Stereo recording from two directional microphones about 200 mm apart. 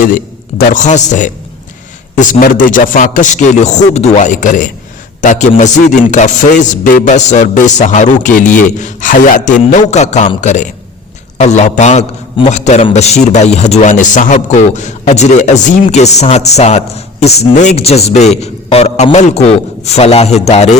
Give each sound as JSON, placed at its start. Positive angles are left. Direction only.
{"t": 0.7, "sound": "a man's voice", "side_deg": 35}